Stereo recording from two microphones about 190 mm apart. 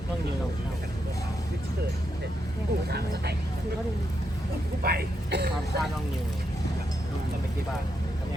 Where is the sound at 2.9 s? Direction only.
60° right (ahead or behind).